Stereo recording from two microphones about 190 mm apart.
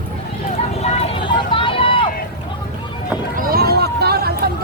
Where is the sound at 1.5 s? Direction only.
25° left (ahead or behind).